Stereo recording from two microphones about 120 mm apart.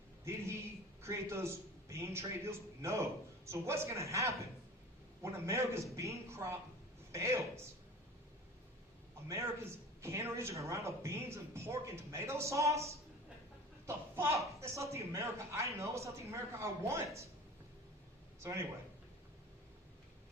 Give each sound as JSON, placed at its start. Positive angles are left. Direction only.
{"t": 0.3, "sound": "a sound", "side_deg": -20}
{"t": 1.0, "sound": "a man's voice", "side_deg": -20}
{"t": 10.0, "sound": "a man's voice", "side_deg": -20}
{"t": 18.3, "sound": "speech", "side_deg": -20}